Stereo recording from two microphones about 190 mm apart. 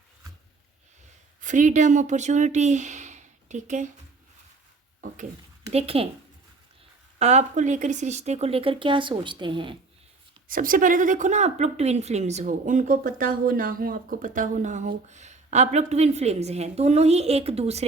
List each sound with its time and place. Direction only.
1.4 s speech: 40° right (ahead or behind)
5.7 s speech: 30° right (ahead or behind)
7.2 s speech: 35° right (ahead or behind)
10.5 s speech: 45° right (ahead or behind)